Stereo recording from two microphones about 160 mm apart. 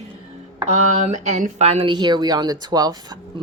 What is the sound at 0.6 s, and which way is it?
A woman's voice, 45° right (ahead or behind).